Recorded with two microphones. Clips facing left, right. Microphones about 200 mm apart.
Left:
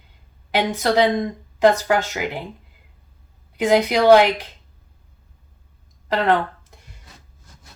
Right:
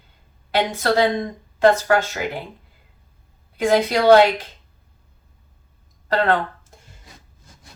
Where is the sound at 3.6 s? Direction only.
15° left (ahead or behind).